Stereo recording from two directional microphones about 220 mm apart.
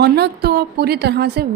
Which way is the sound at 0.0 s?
45° right (ahead or behind).